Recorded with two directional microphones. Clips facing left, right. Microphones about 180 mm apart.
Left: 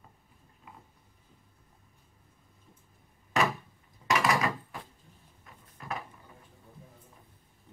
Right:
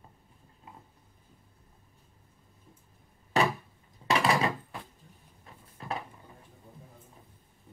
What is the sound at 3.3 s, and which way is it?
Door, 35° right (ahead or behind).